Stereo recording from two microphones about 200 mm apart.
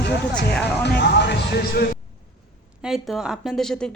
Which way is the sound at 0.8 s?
60° left (ahead or behind).